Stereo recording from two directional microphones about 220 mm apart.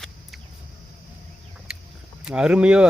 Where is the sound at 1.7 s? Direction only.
5° right (ahead or behind).